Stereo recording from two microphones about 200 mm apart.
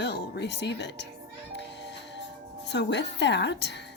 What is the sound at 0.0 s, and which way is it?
Speech, 55° left (ahead or behind).